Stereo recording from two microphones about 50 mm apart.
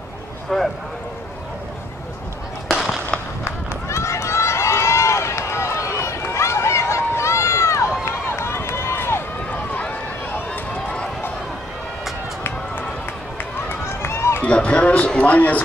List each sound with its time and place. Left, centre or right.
0.5 s speech: centre
2.7 s a sound: centre
3.4 s run: left
13.7 s run: left
14.4 s run: left
15.1 s a man's voice: left